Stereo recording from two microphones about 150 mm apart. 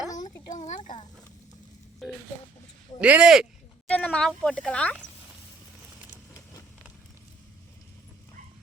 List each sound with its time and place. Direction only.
0.5 s a sound: 55° left (ahead or behind)
2.0 s speech: centre (ahead or behind)
3.8 s speech: 10° left (ahead or behind)